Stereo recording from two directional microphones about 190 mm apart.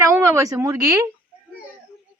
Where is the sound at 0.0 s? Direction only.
15° right (ahead or behind).